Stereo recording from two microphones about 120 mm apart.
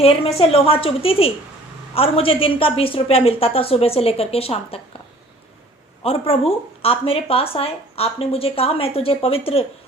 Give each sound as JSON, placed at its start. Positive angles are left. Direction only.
{"t": 0.0, "sound": "speech", "side_deg": 55}
{"t": 6.0, "sound": "speech", "side_deg": 55}